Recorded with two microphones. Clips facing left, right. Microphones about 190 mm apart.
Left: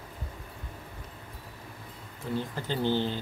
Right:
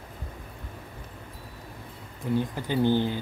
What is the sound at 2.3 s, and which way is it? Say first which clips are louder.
Speech: right 5 dB; 15° right (ahead or behind).